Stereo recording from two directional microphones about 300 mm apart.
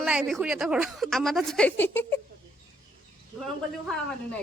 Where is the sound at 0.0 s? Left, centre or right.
Centre.